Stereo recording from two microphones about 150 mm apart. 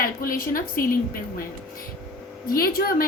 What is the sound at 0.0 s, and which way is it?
A woman's voice, 75° left (ahead or behind).